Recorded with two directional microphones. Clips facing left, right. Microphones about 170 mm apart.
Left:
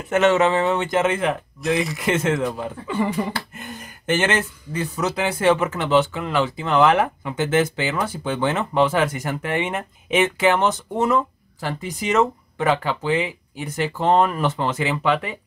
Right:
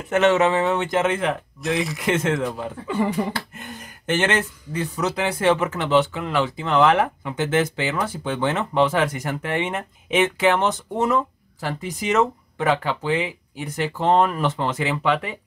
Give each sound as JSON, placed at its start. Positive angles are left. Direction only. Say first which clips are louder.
{"t": 0.1, "sound": "speech", "louder": "left 1 dB", "side_deg": 0}